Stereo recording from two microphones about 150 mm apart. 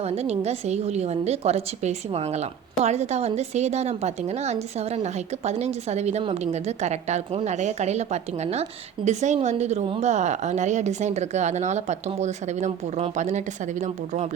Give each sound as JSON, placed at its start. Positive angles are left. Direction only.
{"t": 0.0, "sound": "a woman's voice", "side_deg": -45}
{"t": 10.1, "sound": "a woman's voice", "side_deg": -50}